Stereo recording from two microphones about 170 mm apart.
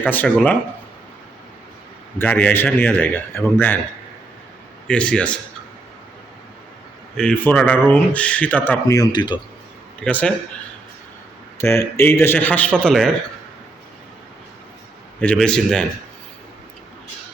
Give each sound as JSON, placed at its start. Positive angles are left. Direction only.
{"t": 0.0, "sound": "speech", "side_deg": 10}
{"t": 2.1, "sound": "speech", "side_deg": 10}
{"t": 4.9, "sound": "speech", "side_deg": 5}
{"t": 7.2, "sound": "speech", "side_deg": 10}
{"t": 10.0, "sound": "speech", "side_deg": 5}
{"t": 11.5, "sound": "speech", "side_deg": 15}
{"t": 15.2, "sound": "a man's voice", "side_deg": 5}